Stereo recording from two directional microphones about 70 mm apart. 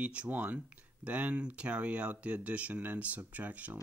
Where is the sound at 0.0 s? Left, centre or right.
Centre.